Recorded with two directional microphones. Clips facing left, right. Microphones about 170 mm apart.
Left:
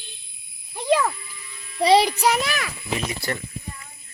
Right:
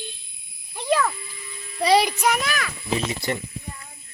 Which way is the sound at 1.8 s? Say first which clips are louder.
Left 2 dB; 25° left (ahead or behind).